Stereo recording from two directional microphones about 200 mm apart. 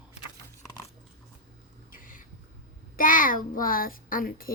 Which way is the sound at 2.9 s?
45° left (ahead or behind).